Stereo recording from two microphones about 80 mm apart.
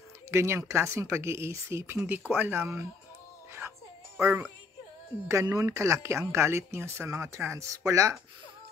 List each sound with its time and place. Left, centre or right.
0.3 s speech: right
2.0 s speech: right
5.3 s speech: right